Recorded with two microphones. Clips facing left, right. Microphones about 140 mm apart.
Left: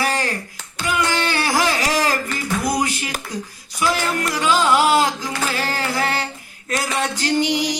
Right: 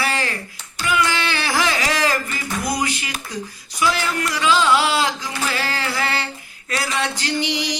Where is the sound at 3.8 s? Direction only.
45° left (ahead or behind).